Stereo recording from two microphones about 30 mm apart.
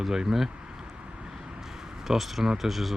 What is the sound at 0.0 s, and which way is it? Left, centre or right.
Speech, centre.